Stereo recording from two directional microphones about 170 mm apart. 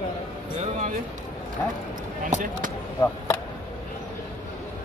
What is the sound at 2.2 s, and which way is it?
Speech, 50° right (ahead or behind).